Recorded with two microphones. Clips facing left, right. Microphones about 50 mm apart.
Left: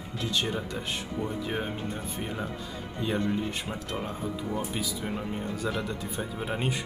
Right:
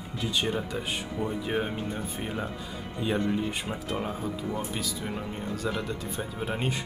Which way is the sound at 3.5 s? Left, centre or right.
Centre.